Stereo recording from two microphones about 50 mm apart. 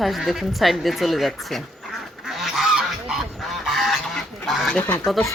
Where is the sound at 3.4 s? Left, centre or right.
Centre.